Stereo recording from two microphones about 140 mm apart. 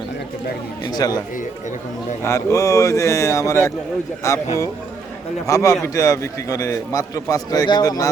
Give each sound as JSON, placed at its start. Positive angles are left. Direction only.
{"t": 1.0, "sound": "a man's voice", "side_deg": 25}
{"t": 2.2, "sound": "a man's voice", "side_deg": 20}
{"t": 5.5, "sound": "a man's voice", "side_deg": 25}